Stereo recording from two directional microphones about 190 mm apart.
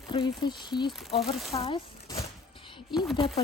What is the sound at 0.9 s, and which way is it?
Speech, centre (ahead or behind).